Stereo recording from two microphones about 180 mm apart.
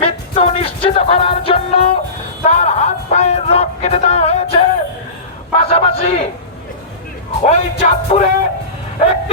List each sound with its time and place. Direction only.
0.0 s music: 35° left (ahead or behind)
7.4 s music: 40° left (ahead or behind)